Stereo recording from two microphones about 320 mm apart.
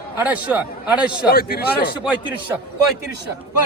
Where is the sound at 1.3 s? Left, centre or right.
Left.